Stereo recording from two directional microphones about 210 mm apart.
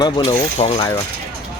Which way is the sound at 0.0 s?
25° left (ahead or behind).